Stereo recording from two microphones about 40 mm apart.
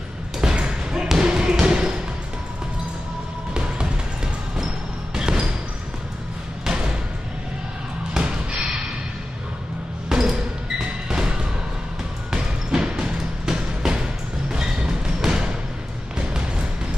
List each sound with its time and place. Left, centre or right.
0.4 s a sound: right
1.0 s basketball bounce: centre
3.5 s music: right
5.1 s basketball bounce: centre
6.6 s music: centre
8.2 s basketball bounce: right
10.0 s music: centre
12.3 s music: centre